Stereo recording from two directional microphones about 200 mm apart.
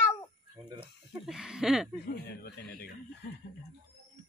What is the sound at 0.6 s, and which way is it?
Speech, 20° right (ahead or behind).